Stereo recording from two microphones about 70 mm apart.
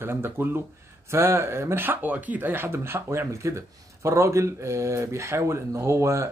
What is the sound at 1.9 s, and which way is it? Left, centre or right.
Speech, right.